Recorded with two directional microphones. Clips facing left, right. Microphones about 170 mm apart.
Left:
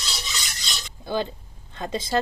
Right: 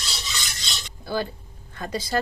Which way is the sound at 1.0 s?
20° left (ahead or behind).